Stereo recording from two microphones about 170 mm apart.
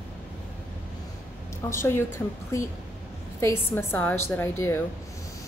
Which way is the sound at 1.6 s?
15° left (ahead or behind).